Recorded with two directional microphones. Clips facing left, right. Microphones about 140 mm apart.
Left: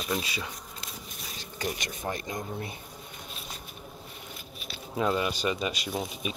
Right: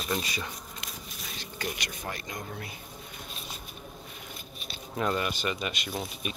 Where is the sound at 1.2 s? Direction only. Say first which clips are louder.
Left 2 dB; 10° left (ahead or behind).